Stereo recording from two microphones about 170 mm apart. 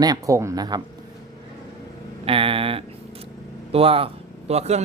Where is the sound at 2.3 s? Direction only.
30° right (ahead or behind).